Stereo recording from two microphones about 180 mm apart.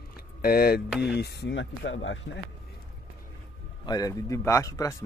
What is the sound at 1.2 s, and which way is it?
Speech, 70° left (ahead or behind).